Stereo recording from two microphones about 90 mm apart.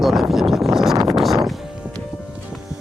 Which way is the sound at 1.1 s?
Centre (ahead or behind).